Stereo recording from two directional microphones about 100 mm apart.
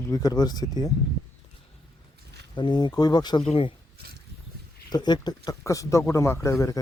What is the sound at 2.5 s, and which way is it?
Speech, 50° left (ahead or behind).